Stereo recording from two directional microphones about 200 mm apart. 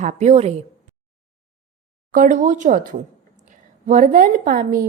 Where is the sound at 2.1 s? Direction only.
40° right (ahead or behind).